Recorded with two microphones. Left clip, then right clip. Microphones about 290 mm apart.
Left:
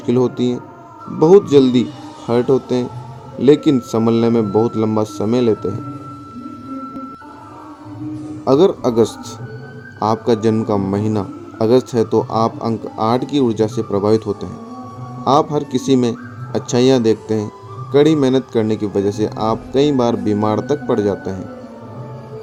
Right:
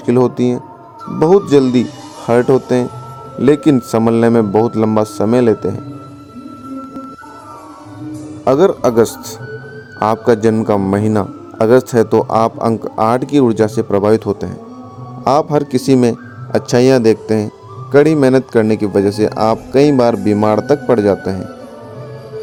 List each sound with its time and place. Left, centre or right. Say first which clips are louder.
0.0 s a man's voice: right 4 dB; right
8.4 s a man's voice: right 2 dB; right